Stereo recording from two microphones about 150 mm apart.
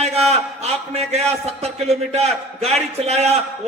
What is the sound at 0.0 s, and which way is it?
A man's voice, 45° right (ahead or behind).